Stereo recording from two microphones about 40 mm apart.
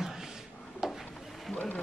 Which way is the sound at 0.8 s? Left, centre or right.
Centre.